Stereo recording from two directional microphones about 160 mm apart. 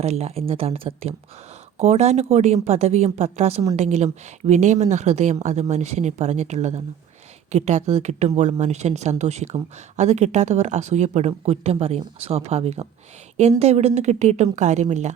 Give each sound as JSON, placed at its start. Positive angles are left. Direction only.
{"t": 0.0, "sound": "speech", "side_deg": -40}